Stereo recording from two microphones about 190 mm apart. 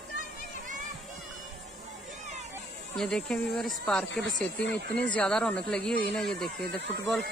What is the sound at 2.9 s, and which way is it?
Speech, centre (ahead or behind).